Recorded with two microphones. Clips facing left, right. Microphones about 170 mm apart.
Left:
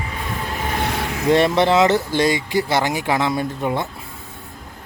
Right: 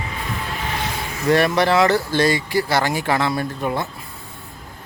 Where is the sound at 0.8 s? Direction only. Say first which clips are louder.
Left 4 dB; 70° left (ahead or behind).